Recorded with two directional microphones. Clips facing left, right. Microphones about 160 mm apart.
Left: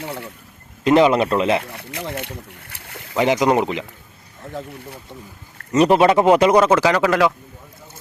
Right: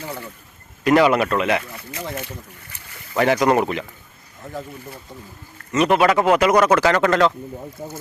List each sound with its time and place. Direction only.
0.9 s speech: 25° left (ahead or behind)
1.6 s speech: 65° left (ahead or behind)
3.2 s speech: 15° left (ahead or behind)
5.7 s speech: 35° left (ahead or behind)
6.7 s speech: 10° left (ahead or behind)
7.8 s speech: 50° right (ahead or behind)